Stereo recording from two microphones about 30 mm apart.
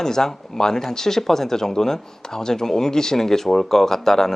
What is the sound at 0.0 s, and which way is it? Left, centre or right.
Speech, centre.